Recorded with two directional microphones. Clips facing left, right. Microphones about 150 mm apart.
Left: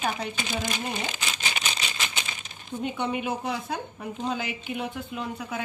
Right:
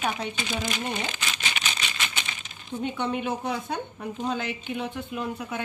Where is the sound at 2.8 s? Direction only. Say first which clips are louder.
Even; 10° left (ahead or behind).